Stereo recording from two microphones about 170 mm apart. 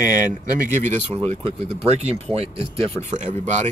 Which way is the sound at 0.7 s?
45° right (ahead or behind).